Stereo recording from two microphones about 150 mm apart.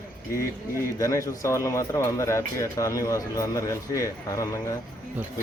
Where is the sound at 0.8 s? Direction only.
20° left (ahead or behind).